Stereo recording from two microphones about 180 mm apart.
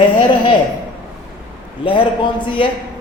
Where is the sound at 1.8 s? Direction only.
30° left (ahead or behind).